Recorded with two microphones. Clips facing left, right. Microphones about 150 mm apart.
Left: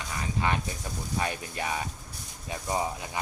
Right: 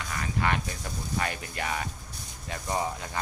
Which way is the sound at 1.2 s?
15° left (ahead or behind).